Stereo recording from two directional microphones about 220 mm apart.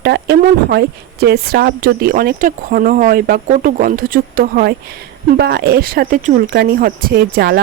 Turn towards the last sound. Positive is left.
turn(degrees=-45)  # may be behind; listen again after turning